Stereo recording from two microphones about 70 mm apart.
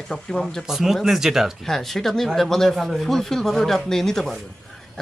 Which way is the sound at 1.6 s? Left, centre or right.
Centre.